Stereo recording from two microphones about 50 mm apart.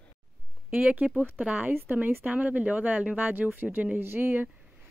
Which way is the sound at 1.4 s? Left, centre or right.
Right.